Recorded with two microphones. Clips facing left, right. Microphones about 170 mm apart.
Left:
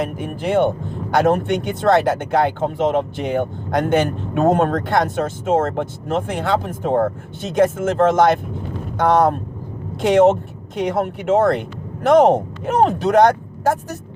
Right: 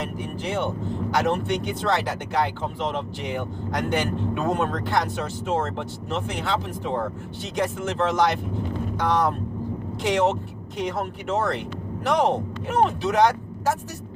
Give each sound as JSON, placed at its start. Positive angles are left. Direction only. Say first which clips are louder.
{"t": 0.0, "sound": "speech", "louder": "left 6 dB", "side_deg": 50}